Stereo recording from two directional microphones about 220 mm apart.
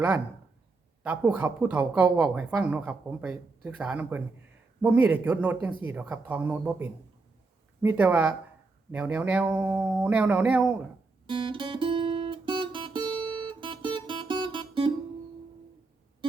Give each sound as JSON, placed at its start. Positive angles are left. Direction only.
{"t": 1.0, "sound": "speech", "side_deg": -10}
{"t": 11.3, "sound": "guitar", "side_deg": -20}